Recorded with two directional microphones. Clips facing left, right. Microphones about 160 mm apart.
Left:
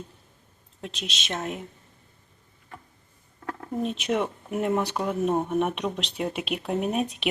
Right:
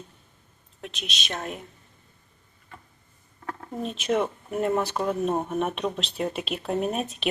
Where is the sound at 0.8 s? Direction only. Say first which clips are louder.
Left 1 dB; 30° left (ahead or behind).